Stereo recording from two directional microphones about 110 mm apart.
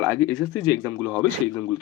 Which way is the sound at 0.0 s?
15° left (ahead or behind).